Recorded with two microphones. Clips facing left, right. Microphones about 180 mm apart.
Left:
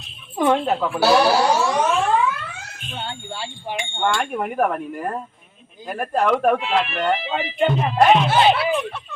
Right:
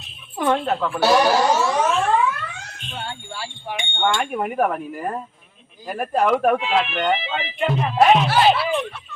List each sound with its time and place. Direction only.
0.3 s speech: 5° left (ahead or behind)
1.6 s a sound: centre (ahead or behind)
3.1 s speech: 25° left (ahead or behind)
3.8 s speech: centre (ahead or behind)